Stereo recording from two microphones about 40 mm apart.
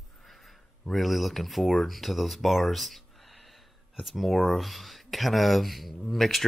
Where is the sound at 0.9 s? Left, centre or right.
Centre.